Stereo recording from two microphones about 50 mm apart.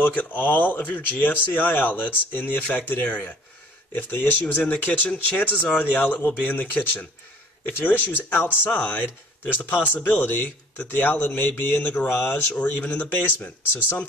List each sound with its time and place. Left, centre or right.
0.0 s speech: left
12.5 s speech: left
13.1 s speech: left